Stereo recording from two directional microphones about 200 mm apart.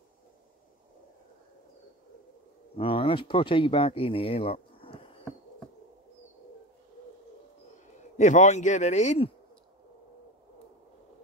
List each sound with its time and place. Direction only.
2.8 s speech: 25° left (ahead or behind)
8.2 s speech: 35° left (ahead or behind)